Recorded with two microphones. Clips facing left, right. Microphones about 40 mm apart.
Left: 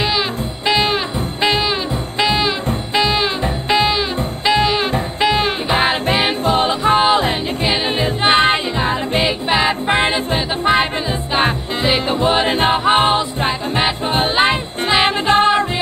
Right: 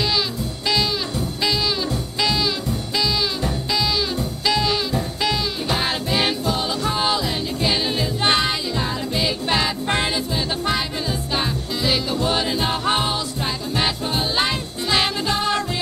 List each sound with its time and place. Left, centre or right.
0.7 s music: left
2.1 s music: left
9.5 s music: left